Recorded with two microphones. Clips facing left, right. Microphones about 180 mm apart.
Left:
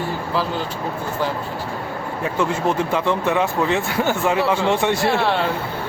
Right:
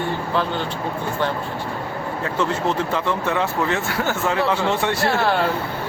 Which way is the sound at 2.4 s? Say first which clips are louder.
Left 2 dB; 15° left (ahead or behind).